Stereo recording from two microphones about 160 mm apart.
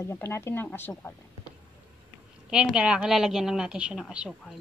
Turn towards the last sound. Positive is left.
turn(degrees=-5)  # may be behind; listen again after turning